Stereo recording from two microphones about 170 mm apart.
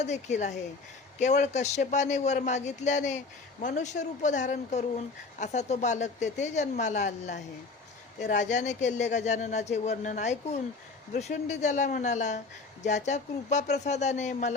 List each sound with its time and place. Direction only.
0.0 s speech: 45° left (ahead or behind)